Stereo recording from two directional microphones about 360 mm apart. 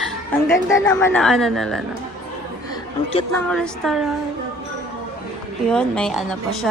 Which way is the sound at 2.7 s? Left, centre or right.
Centre.